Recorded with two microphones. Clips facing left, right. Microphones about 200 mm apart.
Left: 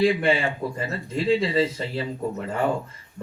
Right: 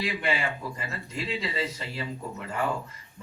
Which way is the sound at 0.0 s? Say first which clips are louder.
Left 9 dB; 30° left (ahead or behind).